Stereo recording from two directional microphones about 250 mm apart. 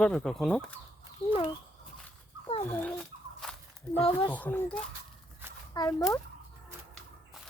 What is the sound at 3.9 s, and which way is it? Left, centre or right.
Speech, left.